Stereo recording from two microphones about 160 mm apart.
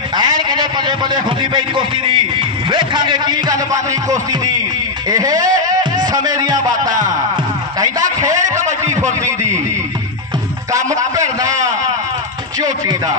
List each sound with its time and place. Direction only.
0.4 s a man's voice: 30° right (ahead or behind)
5.0 s speech: 25° right (ahead or behind)
6.7 s music: 55° right (ahead or behind)
8.0 s a man's voice: 50° right (ahead or behind)
10.8 s a man's voice: 50° right (ahead or behind)